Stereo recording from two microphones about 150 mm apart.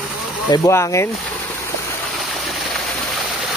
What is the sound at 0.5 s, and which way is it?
Speech, 20° left (ahead or behind).